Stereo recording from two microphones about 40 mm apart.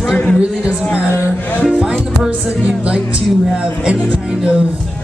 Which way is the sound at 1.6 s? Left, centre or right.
Right.